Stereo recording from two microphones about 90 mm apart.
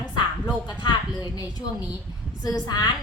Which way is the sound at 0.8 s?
50° left (ahead or behind).